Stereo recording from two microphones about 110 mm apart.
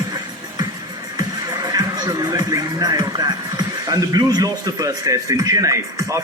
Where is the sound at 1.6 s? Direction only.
35° right (ahead or behind).